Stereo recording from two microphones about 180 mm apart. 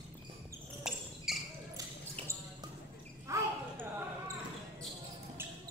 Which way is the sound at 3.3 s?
15° right (ahead or behind).